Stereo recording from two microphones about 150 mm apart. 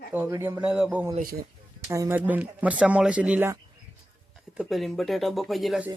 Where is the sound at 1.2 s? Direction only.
75° right (ahead or behind).